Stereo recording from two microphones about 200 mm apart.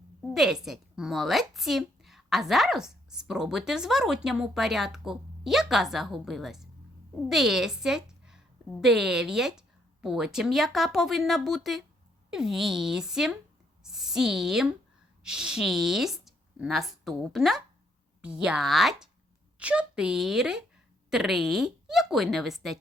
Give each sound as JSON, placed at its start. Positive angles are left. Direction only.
{"t": 0.3, "sound": "a woman's voice", "side_deg": 0}